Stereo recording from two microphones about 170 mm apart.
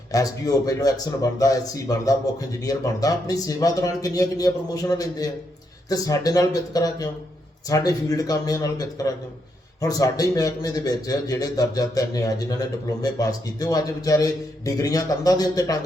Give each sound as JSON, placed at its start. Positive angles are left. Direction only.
{"t": 0.1, "sound": "a man's voice", "side_deg": 20}